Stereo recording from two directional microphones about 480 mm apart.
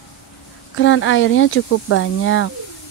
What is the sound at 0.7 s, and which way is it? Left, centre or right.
Speech, left.